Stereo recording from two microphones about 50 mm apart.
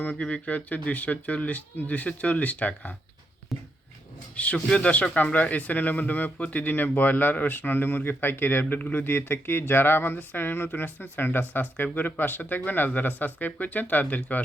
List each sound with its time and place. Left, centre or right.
0.0 s speech: left
3.5 s a sound: centre
4.4 s speech: left